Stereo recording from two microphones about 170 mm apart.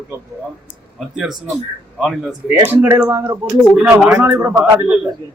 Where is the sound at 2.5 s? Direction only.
10° right (ahead or behind).